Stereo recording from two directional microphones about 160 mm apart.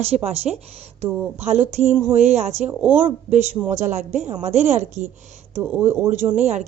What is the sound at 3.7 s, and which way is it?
Speech, 50° right (ahead or behind).